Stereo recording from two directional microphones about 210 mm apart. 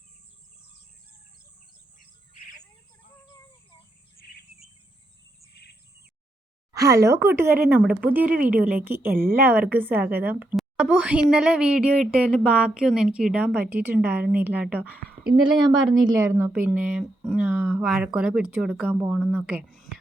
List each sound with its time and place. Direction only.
4.2 s cricket: 45° left (ahead or behind)
7.0 s speech: 15° right (ahead or behind)
15.9 s speech: 20° right (ahead or behind)